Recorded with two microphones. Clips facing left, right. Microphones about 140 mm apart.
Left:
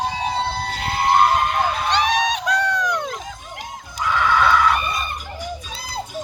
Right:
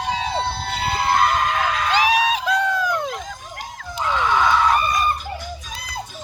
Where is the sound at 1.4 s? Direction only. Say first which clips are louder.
Left 1 dB; 90° right.